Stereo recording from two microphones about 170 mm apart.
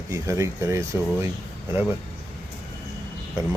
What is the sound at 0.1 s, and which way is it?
Speech, 15° right (ahead or behind).